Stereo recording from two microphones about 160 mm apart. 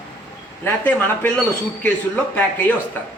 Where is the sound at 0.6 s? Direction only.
10° left (ahead or behind).